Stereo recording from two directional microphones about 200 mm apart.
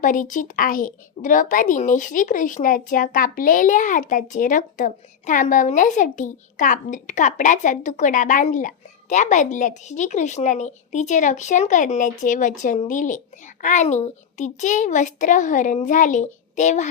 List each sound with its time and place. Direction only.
0.0 s speech: 40° left (ahead or behind)